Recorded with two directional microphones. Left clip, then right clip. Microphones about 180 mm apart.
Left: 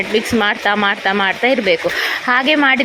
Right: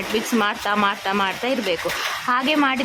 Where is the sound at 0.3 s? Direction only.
15° left (ahead or behind).